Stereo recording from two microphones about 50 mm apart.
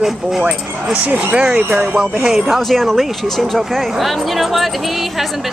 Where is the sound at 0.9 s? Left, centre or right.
Right.